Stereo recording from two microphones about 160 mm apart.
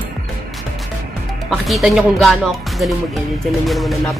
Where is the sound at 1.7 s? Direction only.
Centre (ahead or behind).